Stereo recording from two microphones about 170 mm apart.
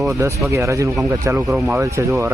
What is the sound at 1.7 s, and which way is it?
Speech, 15° right (ahead or behind).